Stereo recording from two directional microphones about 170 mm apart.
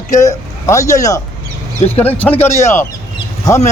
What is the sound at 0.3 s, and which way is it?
Speech, 20° left (ahead or behind).